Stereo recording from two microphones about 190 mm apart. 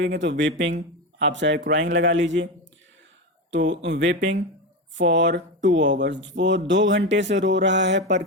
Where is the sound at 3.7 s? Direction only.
70° right (ahead or behind).